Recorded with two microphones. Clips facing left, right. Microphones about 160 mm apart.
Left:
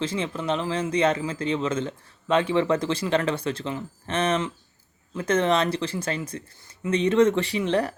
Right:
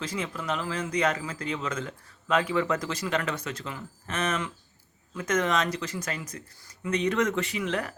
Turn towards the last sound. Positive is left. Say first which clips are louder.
# left 6 dB
turn(degrees=30)  # may be behind; listen again after turning